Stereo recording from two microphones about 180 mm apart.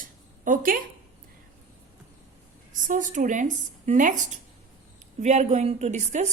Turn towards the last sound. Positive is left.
turn(degrees=-40)  # may be behind; listen again after turning